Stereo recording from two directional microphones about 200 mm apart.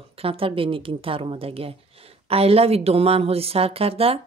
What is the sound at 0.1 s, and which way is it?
A woman's voice, 30° right (ahead or behind).